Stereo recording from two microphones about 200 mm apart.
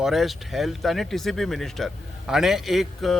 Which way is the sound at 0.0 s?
Centre (ahead or behind).